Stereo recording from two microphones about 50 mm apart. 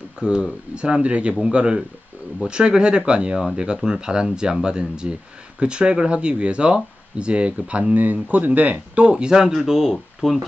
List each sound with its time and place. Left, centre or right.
0.2 s speech: centre
7.9 s speech: right
9.1 s speech: centre